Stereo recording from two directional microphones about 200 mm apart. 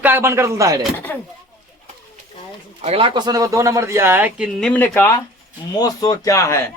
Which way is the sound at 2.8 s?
30° right (ahead or behind).